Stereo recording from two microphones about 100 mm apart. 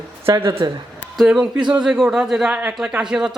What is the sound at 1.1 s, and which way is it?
Speech, 5° right (ahead or behind).